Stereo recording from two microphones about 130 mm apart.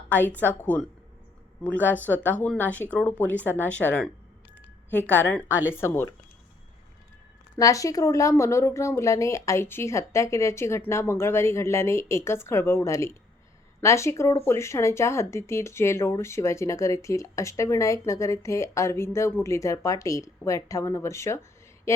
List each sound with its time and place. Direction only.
0.1 s speech: 15° left (ahead or behind)
7.5 s speech: 25° left (ahead or behind)